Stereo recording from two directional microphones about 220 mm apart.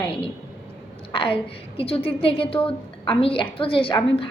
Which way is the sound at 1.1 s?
25° left (ahead or behind).